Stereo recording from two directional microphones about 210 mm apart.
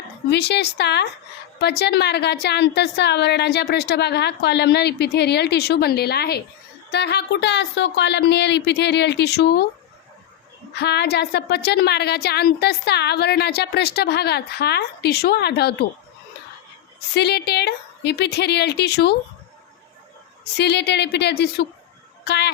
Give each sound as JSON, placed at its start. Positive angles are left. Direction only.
{"t": 0.3, "sound": "a woman's voice", "side_deg": 50}
{"t": 10.8, "sound": "a woman's voice", "side_deg": 50}
{"t": 17.2, "sound": "a woman's voice", "side_deg": 50}
{"t": 20.6, "sound": "a woman's voice", "side_deg": 55}